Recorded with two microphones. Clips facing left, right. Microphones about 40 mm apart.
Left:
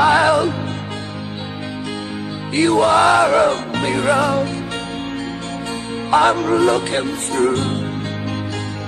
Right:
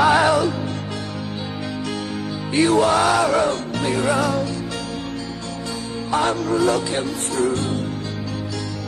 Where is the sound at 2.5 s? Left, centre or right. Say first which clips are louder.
Left 3 dB; left.